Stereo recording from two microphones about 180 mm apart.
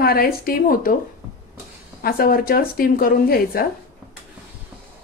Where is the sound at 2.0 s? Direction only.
55° left (ahead or behind).